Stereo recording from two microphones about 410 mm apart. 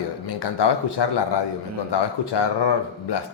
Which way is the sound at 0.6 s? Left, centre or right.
Left.